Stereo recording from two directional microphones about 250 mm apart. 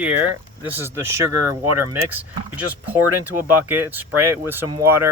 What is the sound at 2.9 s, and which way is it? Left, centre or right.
Speech, centre.